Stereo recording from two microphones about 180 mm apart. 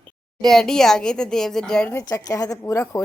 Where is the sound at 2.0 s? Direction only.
20° left (ahead or behind).